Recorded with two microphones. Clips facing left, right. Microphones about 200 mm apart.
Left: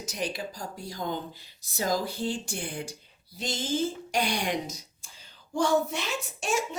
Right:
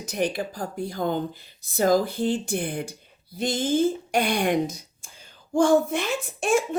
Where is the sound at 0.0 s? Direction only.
55° right (ahead or behind).